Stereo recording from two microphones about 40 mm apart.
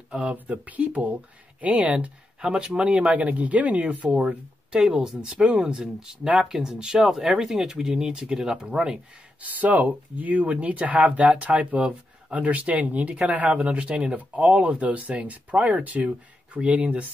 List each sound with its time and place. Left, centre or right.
0.1 s speech: right
2.4 s speech: right
2.8 s speech: right
4.7 s speech: right
5.4 s speech: right
6.5 s speech: centre
9.4 s speech: right